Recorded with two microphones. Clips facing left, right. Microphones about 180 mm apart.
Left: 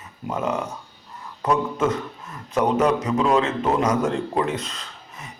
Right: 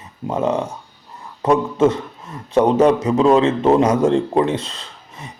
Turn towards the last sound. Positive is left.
turn(degrees=-30)  # may be behind; listen again after turning